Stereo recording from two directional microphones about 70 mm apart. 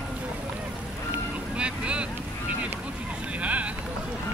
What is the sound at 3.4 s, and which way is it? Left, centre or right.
Vehicle, centre.